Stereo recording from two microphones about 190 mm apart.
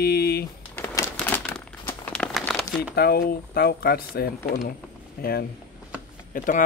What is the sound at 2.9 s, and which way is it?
Speech, 55° left (ahead or behind).